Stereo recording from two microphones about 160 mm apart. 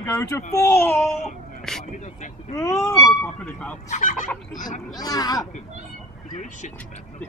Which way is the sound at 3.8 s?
50° left (ahead or behind).